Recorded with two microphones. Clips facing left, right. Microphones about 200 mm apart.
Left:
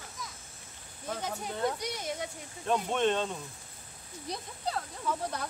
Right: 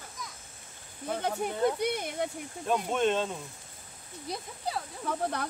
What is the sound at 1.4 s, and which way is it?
Speech, 60° right (ahead or behind).